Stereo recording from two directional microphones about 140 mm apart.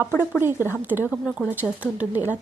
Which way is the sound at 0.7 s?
15° right (ahead or behind).